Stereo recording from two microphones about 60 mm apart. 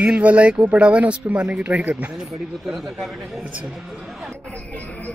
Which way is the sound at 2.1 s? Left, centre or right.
Centre.